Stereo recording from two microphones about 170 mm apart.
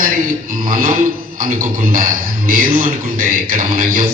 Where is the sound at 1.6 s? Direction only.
55° right (ahead or behind).